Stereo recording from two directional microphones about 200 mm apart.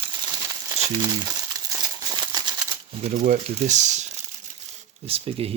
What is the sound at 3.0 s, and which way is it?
Speech, 35° right (ahead or behind).